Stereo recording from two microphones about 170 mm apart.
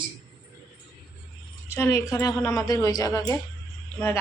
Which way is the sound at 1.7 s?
15° left (ahead or behind).